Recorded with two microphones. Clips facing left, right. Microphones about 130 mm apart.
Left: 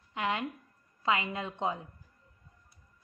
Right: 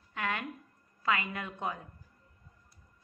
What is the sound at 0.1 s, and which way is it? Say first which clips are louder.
Speech: left 3 dB; 20° left (ahead or behind).